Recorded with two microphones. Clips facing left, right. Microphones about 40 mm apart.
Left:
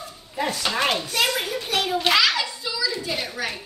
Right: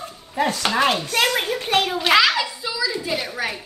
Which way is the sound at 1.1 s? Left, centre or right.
Right.